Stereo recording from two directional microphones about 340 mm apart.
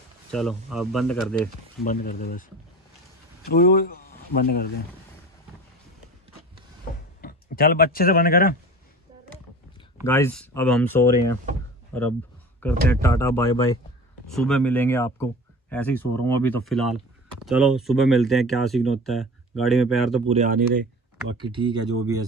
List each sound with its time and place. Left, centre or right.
0.3 s speech: centre
1.9 s speech: left
3.4 s speech: left
7.2 s speech: left
10.0 s speech: centre
20.2 s speech: right
21.4 s speech: centre